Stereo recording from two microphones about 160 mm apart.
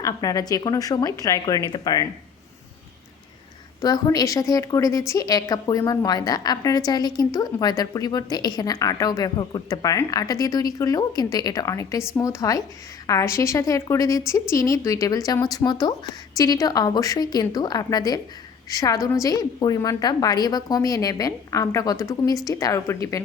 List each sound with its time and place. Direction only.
0.0 s a woman's voice: 20° left (ahead or behind)
3.8 s a woman's voice: 25° left (ahead or behind)